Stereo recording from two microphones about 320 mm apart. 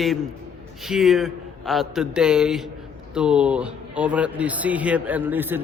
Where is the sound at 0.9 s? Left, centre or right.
Centre.